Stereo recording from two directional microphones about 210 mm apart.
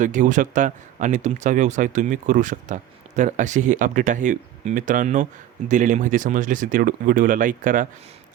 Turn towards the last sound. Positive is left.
turn(degrees=-40)  # may be behind; listen again after turning